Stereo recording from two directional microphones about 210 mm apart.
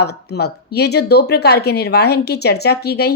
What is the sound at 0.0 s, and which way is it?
Speech, 50° left (ahead or behind).